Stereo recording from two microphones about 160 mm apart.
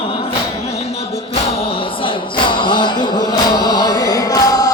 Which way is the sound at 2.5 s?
30° left (ahead or behind).